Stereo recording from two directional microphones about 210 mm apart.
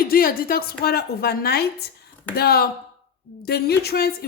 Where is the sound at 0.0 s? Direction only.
45° left (ahead or behind).